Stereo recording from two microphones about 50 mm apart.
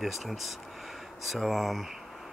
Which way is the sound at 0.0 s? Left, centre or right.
Centre.